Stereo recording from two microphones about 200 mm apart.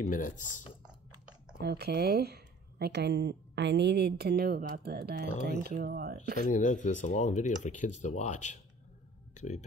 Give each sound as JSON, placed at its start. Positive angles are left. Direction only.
{"t": 0.0, "sound": "speech", "side_deg": 40}
{"t": 1.6, "sound": "speech", "side_deg": -55}
{"t": 6.4, "sound": "speech", "side_deg": 40}